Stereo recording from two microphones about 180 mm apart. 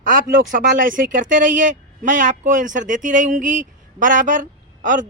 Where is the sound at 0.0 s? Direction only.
45° right (ahead or behind).